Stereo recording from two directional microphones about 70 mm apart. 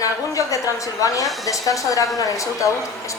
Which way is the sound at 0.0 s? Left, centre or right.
Left.